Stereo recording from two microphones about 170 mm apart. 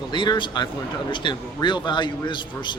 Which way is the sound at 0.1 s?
25° left (ahead or behind).